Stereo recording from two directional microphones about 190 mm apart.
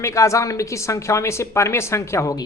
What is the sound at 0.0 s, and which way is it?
Speech, 15° left (ahead or behind).